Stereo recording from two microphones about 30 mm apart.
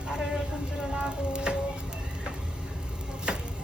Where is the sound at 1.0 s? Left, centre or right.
Right.